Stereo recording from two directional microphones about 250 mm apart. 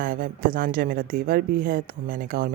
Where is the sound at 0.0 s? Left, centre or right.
Right.